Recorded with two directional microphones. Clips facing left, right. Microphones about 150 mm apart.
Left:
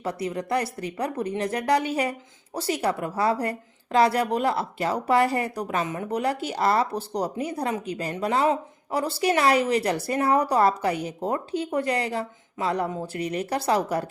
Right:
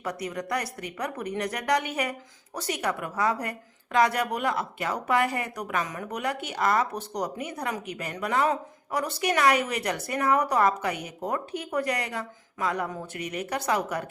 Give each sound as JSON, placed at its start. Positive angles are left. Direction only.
{"t": 0.0, "sound": "a woman's voice", "side_deg": 30}